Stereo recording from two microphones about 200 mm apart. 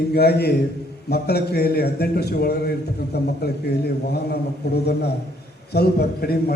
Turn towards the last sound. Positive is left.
turn(degrees=50)  # may be behind; listen again after turning